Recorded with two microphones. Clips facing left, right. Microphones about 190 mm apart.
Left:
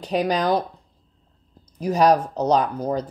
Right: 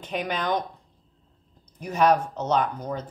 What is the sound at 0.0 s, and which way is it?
Speech, 35° left (ahead or behind).